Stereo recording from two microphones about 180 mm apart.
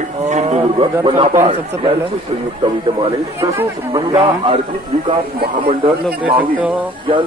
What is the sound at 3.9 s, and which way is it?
Speech, 30° right (ahead or behind).